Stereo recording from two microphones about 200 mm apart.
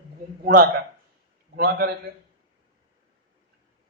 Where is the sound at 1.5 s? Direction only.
55° right (ahead or behind).